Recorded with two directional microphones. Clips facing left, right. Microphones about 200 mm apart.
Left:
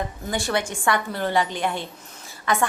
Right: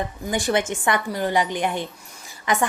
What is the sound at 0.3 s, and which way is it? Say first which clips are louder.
A woman's voice: right 4 dB; 15° right (ahead or behind).